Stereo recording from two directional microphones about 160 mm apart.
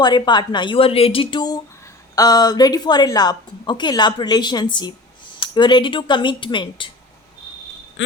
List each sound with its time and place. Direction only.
0.0 s a woman's voice: 30° left (ahead or behind)